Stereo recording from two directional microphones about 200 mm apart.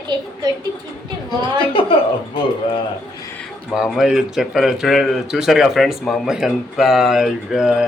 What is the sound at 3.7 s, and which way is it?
Speech, centre (ahead or behind).